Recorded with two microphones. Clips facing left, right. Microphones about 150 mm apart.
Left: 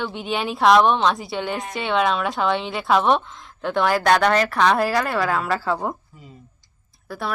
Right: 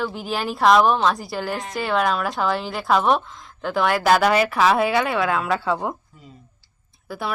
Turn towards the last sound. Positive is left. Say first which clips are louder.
# even
turn(degrees=0)  # may be behind; listen again after turning